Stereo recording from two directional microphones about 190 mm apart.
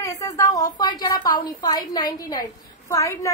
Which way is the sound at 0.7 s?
20° left (ahead or behind).